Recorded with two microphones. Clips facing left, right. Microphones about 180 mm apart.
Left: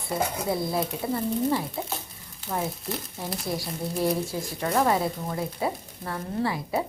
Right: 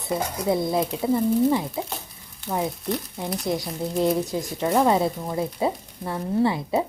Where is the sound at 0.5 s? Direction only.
20° right (ahead or behind).